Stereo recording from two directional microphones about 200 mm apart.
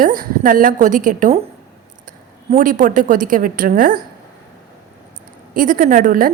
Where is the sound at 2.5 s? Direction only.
40° right (ahead or behind).